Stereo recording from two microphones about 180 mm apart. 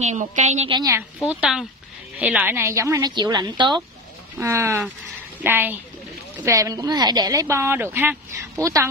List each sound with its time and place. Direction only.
0.0 s a woman's voice: 40° right (ahead or behind)
0.7 s a woman's voice: 20° right (ahead or behind)
1.2 s a woman's voice: 5° right (ahead or behind); by 3.8 s 25° right (ahead or behind)
4.4 s a woman's voice: 15° right (ahead or behind)